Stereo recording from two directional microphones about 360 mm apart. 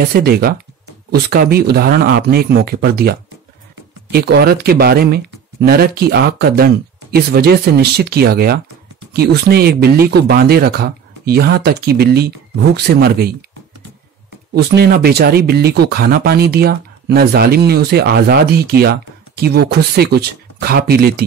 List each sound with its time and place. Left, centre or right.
0.1 s speech: right
14.5 s speech: right